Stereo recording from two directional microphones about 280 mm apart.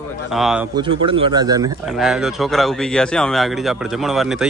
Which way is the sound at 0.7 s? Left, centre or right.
Centre.